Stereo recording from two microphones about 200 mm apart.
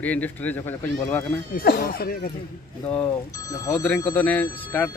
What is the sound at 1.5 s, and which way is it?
Speech, 50° left (ahead or behind).